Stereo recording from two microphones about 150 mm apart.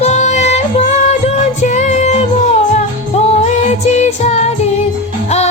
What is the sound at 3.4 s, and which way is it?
Music, 50° left (ahead or behind).